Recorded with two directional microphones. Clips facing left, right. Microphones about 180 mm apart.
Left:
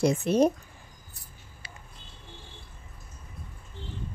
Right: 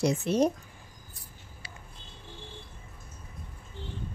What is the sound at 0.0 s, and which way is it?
Speech, 55° left (ahead or behind).